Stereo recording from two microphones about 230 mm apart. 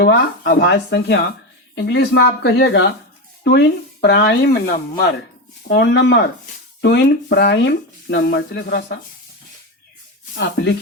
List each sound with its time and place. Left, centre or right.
0.0 s speech: left
5.6 s speech: left
10.3 s speech: left